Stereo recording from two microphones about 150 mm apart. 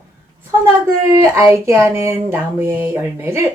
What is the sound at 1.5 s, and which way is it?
Speech, 20° right (ahead or behind).